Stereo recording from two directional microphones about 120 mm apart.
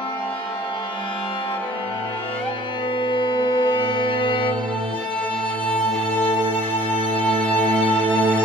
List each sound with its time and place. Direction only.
3.0 s music: 40° left (ahead or behind)
5.7 s music: 10° left (ahead or behind)
8.0 s music: 15° right (ahead or behind)